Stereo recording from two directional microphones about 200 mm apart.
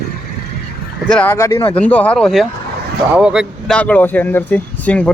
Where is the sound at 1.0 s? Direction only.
5° left (ahead or behind).